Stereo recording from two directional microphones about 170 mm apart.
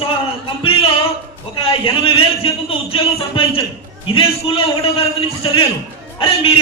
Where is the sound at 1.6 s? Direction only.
35° left (ahead or behind).